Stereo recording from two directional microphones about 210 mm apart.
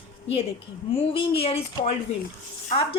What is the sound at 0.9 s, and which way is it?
A woman's voice, 25° left (ahead or behind).